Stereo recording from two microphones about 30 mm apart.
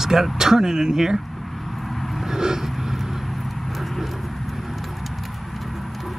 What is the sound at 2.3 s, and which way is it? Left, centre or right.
Vehicle, centre.